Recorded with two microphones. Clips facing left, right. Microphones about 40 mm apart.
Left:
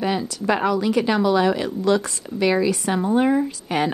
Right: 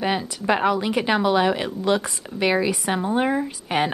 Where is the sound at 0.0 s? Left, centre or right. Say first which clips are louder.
Left 1 dB; centre.